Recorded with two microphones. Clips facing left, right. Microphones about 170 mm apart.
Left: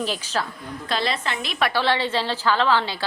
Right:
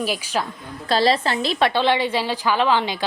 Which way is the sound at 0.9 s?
35° right (ahead or behind).